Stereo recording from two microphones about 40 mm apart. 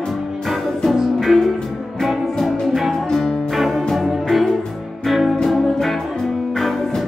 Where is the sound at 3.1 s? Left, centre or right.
Centre.